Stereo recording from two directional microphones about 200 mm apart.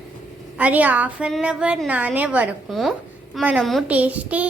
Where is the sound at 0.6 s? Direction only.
5° right (ahead or behind).